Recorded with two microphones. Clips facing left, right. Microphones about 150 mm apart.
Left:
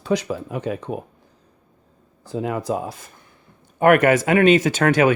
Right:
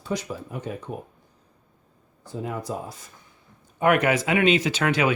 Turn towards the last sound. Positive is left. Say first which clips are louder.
# left 6 dB
turn(degrees=45)  # may be behind; listen again after turning